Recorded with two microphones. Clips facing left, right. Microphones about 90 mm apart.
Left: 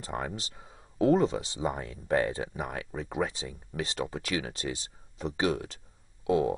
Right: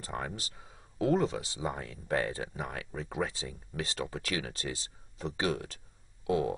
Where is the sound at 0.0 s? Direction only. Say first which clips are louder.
Left 3 dB; 30° left (ahead or behind).